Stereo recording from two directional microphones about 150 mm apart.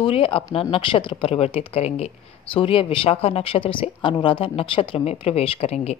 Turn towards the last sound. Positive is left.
turn(degrees=45)  # may be behind; listen again after turning